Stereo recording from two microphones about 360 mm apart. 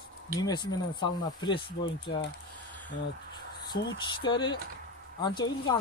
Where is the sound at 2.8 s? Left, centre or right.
Centre.